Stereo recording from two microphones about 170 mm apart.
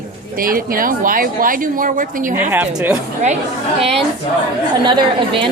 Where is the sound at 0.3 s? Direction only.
55° right (ahead or behind).